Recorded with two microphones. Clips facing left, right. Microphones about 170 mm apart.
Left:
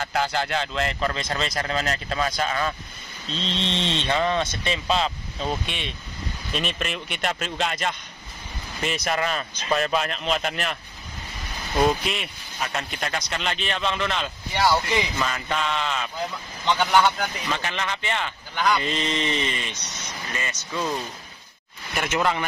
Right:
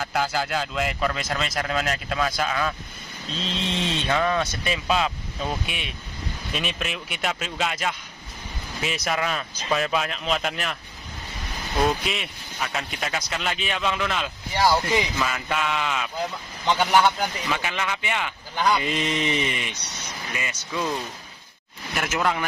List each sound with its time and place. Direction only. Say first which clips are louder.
0.0 s speech: even; 5° right (ahead or behind)
4.1 s a man's voice: even; 20° left (ahead or behind)
4.6 s speech: right 1 dB; 10° right (ahead or behind)
11.8 s speech: left 2 dB; centre (ahead or behind)
21.9 s speech: left 1 dB; centre (ahead or behind)